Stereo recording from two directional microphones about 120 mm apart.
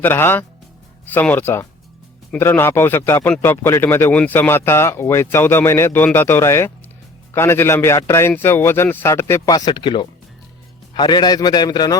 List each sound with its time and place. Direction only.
0.0 s speech: 15° left (ahead or behind)
9.6 s a man's voice: 35° left (ahead or behind)